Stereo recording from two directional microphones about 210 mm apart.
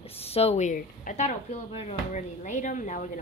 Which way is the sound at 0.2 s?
30° left (ahead or behind).